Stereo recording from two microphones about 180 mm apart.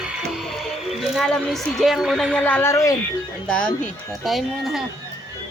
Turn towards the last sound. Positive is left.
turn(degrees=0)  # may be behind; listen again after turning